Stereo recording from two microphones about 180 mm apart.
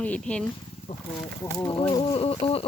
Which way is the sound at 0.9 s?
40° left (ahead or behind).